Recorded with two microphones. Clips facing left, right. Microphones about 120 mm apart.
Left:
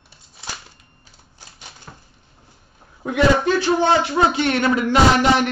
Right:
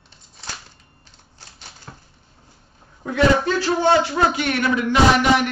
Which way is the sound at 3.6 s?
20° left (ahead or behind).